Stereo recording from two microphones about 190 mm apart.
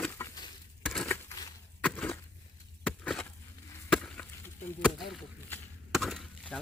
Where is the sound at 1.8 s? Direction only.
10° left (ahead or behind).